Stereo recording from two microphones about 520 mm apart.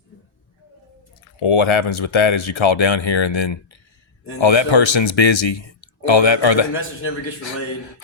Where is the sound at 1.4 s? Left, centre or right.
Left.